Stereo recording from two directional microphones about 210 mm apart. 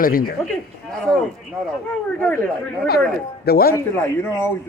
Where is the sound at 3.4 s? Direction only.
45° left (ahead or behind).